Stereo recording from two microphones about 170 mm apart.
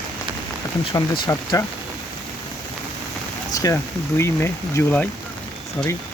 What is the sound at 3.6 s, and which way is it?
Speech, 15° left (ahead or behind).